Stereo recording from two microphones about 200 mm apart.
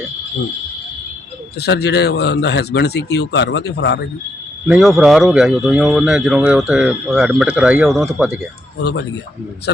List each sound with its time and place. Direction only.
1.5 s speech: 55° left (ahead or behind)
4.7 s speech: 5° right (ahead or behind)
8.8 s speech: 60° left (ahead or behind)